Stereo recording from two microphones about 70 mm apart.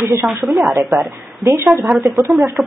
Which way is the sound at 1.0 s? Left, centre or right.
Right.